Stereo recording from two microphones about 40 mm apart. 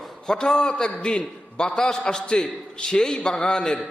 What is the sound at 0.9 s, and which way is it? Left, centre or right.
A man's voice, left.